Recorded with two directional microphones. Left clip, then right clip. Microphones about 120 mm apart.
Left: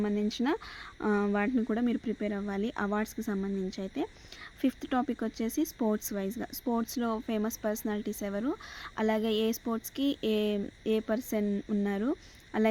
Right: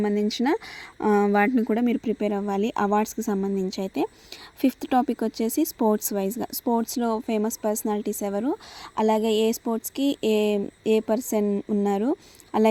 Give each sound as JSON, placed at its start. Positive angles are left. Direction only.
{"t": 0.0, "sound": "speech", "side_deg": -55}
{"t": 4.6, "sound": "speech", "side_deg": -50}